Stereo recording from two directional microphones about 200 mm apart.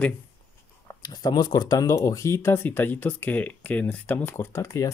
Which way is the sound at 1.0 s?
20° left (ahead or behind).